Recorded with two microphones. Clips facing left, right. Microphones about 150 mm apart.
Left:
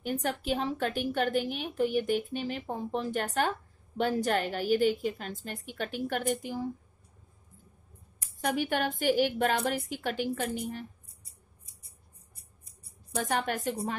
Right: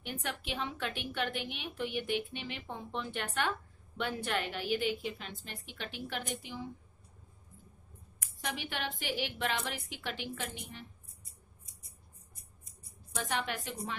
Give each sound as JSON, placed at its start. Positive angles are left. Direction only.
{"t": 0.0, "sound": "a woman's voice", "side_deg": 40}
{"t": 8.4, "sound": "a woman's voice", "side_deg": 45}
{"t": 12.6, "sound": "a sound", "side_deg": 35}